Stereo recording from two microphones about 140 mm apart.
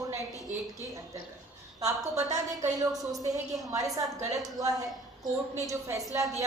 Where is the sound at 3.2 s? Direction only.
25° right (ahead or behind).